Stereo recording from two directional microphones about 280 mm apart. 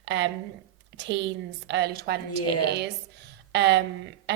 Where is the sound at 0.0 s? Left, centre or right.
Right.